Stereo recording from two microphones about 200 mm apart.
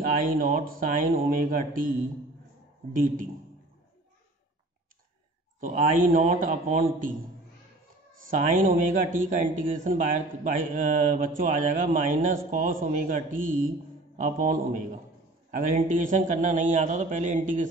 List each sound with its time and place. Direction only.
0.0 s speech: 45° right (ahead or behind)
2.9 s speech: 40° right (ahead or behind)
5.6 s a man's voice: 40° right (ahead or behind)
8.3 s a man's voice: 40° right (ahead or behind)